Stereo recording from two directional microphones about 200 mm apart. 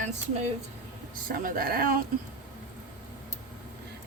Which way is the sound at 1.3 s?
45° right (ahead or behind).